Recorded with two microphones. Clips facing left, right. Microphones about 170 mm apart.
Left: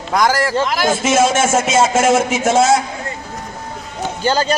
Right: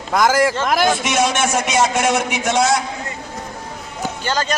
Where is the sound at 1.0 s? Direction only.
25° left (ahead or behind).